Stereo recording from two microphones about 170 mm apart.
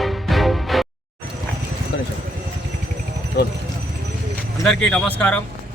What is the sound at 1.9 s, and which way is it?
Clip-clop, 90° left.